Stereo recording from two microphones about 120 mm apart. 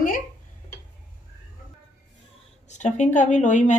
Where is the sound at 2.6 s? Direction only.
80° left.